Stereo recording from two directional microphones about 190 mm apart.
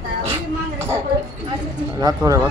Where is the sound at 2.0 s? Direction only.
20° right (ahead or behind).